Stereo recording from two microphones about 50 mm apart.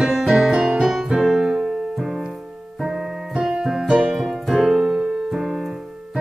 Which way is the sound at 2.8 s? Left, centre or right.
Centre.